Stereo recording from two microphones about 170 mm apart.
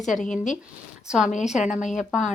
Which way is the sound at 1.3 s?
45° left (ahead or behind).